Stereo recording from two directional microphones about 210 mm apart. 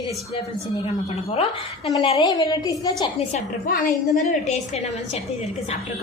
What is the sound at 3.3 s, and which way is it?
A woman's voice, 40° left (ahead or behind).